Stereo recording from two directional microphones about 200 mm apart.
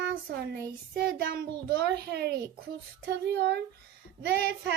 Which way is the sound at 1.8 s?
55° right (ahead or behind).